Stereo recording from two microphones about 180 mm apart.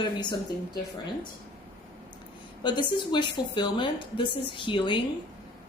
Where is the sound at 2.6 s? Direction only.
25° left (ahead or behind).